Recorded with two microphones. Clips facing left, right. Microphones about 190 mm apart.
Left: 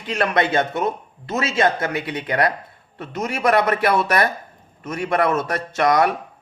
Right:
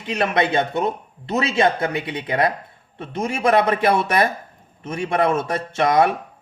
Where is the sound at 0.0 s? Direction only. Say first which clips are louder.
Even; 20° right (ahead or behind).